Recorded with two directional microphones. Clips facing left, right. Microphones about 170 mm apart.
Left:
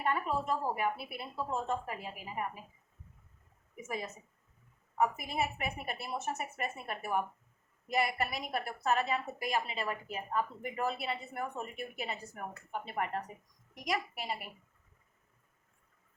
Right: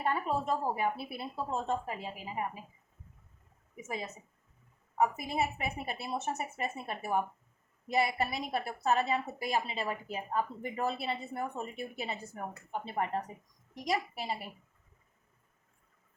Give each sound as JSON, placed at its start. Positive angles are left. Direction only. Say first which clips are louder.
{"t": 0.0, "sound": "a woman's voice", "louder": "right 1 dB", "side_deg": -30}
{"t": 3.8, "sound": "a woman's voice", "louder": "even", "side_deg": -25}